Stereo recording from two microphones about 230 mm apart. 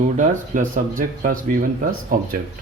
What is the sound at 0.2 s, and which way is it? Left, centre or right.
Speech, right.